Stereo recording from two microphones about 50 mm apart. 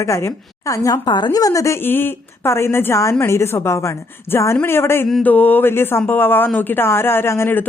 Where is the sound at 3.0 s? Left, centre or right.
Left.